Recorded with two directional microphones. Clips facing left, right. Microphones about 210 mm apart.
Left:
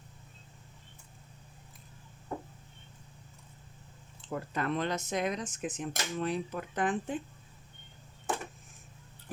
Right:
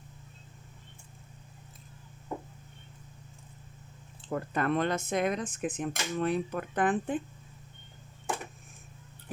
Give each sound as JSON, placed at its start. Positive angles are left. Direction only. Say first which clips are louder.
{"t": 4.3, "sound": "speech", "louder": "right 4 dB", "side_deg": -55}